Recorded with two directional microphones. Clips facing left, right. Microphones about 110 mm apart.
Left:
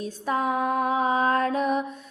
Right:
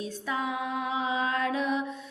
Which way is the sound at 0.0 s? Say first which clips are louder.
Left 6 dB; 45° left (ahead or behind).